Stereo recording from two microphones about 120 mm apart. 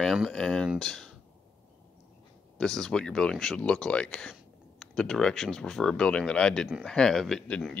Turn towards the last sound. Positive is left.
turn(degrees=10)  # may be behind; listen again after turning